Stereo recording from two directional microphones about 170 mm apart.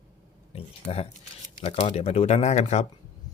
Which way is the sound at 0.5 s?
35° left (ahead or behind).